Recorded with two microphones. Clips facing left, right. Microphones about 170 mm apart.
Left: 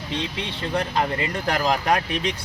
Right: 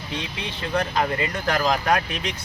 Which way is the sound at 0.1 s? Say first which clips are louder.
Left 3 dB; 30° left (ahead or behind).